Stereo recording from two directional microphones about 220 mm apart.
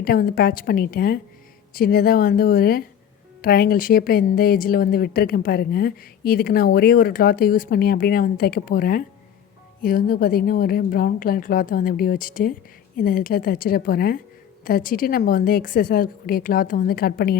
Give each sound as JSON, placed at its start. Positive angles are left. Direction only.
{"t": 0.0, "sound": "a woman's voice", "side_deg": 40}